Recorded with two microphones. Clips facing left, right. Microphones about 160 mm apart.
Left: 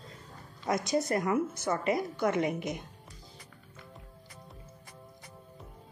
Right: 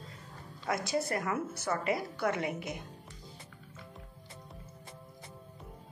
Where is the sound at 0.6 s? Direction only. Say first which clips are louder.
Left 3 dB; 20° left (ahead or behind).